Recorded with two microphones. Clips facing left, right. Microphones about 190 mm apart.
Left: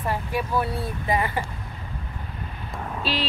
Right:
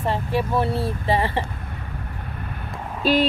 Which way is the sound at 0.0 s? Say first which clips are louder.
Right 4 dB; 25° right (ahead or behind).